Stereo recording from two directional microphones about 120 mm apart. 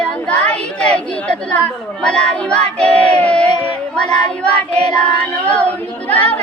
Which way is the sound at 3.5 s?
55° right (ahead or behind).